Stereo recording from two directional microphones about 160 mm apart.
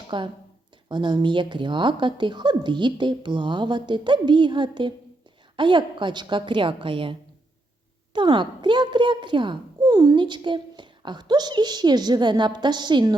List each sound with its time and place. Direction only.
0.1 s a child's voice: 30° right (ahead or behind)